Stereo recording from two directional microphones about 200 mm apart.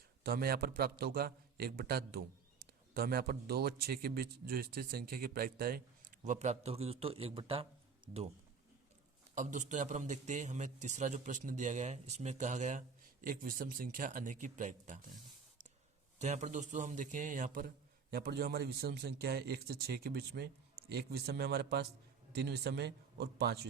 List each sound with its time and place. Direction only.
0.2 s a man's voice: 50° right (ahead or behind); by 7.7 s 25° right (ahead or behind)
9.3 s a man's voice: 40° right (ahead or behind)
16.2 s a man's voice: 35° right (ahead or behind); by 23.6 s 55° right (ahead or behind)